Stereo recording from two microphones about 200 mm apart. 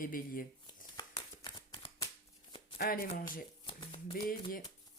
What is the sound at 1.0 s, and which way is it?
Shuffling cards, 25° left (ahead or behind).